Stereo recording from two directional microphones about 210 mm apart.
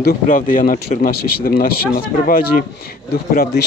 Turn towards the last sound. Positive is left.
turn(degrees=45)  # may be behind; listen again after turning